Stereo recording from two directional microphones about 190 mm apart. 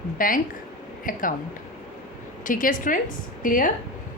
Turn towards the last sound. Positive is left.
turn(degrees=45)  # may be behind; listen again after turning